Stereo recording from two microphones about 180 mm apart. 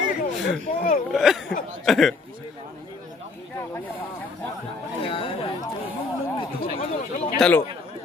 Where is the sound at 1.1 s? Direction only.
Centre (ahead or behind).